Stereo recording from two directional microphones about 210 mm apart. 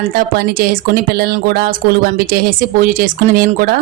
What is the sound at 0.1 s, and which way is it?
A woman's voice, 45° right (ahead or behind).